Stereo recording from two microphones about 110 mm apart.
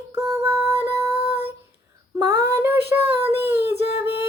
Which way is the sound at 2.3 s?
20° right (ahead or behind).